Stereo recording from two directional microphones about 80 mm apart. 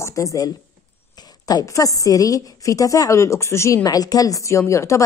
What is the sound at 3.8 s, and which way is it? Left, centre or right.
Speech, left.